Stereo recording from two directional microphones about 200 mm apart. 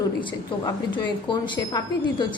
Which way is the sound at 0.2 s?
25° left (ahead or behind).